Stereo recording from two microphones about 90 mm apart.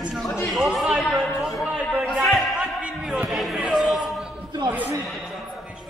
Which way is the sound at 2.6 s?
15° right (ahead or behind).